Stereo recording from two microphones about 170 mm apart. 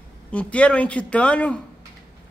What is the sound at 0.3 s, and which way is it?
A man's voice, 5° left (ahead or behind).